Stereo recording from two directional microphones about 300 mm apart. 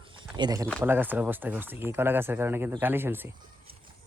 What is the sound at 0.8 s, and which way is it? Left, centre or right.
Speech, centre.